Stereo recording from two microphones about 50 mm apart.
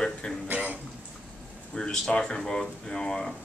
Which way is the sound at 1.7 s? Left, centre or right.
Centre.